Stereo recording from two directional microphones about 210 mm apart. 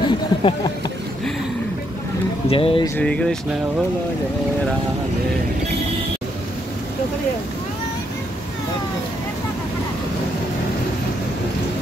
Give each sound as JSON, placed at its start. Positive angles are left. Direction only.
{"t": 0.0, "sound": "a sound", "side_deg": 25}
{"t": 2.5, "sound": "speech", "side_deg": 25}
{"t": 3.0, "sound": "speech", "side_deg": 5}